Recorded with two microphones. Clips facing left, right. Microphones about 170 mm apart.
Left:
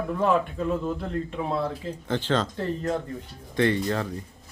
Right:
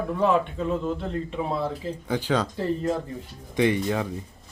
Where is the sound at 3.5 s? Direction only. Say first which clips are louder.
Right 1 dB; 15° right (ahead or behind).